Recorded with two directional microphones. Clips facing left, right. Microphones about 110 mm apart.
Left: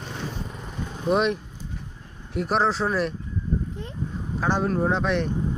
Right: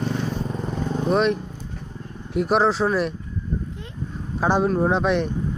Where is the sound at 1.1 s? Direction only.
5° left (ahead or behind).